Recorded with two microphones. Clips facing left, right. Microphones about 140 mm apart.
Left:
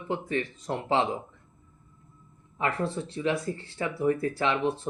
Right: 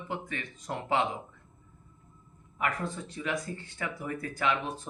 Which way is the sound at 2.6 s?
30° left (ahead or behind).